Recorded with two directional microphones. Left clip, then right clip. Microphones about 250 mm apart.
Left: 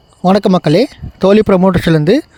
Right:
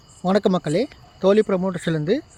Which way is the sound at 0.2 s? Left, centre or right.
Left.